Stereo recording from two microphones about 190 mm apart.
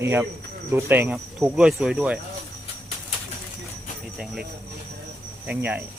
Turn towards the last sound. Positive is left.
turn(degrees=-10)  # may be behind; listen again after turning